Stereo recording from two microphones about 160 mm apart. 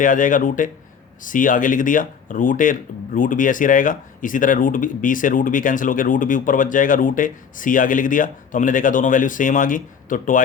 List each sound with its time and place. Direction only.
0.0 s speech: 55° left (ahead or behind)